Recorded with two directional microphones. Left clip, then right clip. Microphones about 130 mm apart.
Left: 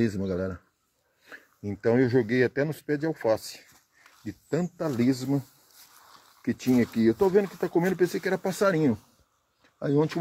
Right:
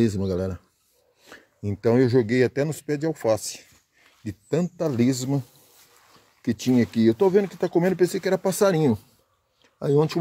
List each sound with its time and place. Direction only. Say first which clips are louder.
0.2 s speech: right 3 dB; 20° right (ahead or behind)
1.6 s speech: right 3 dB; 25° right (ahead or behind)
6.4 s speech: right 3 dB; 35° right (ahead or behind)
6.8 s speech: right 4 dB; 20° right (ahead or behind)